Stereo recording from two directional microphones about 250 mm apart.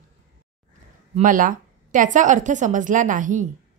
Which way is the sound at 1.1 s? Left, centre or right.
Right.